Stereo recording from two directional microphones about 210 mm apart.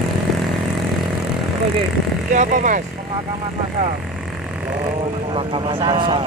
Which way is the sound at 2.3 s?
35° right (ahead or behind).